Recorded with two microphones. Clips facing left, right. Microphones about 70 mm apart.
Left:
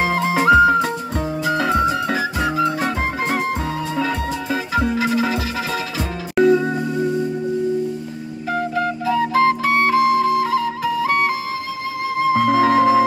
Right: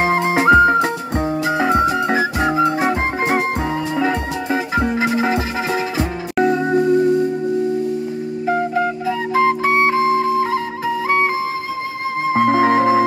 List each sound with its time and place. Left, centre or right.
0.4 s music: centre
2.8 s music: centre
5.1 s music: right
5.7 s music: centre
8.5 s flute: centre
12.2 s music: right